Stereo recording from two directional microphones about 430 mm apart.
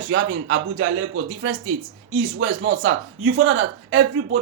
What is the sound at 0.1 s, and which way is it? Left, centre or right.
A man's voice, right.